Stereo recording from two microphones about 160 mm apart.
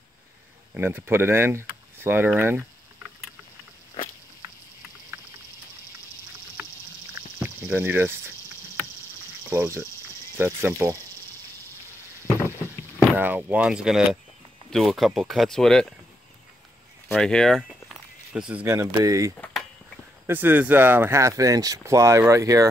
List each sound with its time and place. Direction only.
0.7 s speech: 15° right (ahead or behind)
7.3 s cricket: 15° right (ahead or behind)
9.4 s speech: 20° right (ahead or behind)
13.1 s speech: 10° right (ahead or behind)
17.1 s speech: 5° left (ahead or behind); by 22.7 s 20° right (ahead or behind)